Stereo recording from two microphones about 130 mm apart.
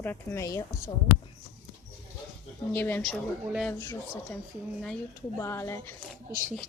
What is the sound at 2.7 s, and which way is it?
Speech, 10° left (ahead or behind).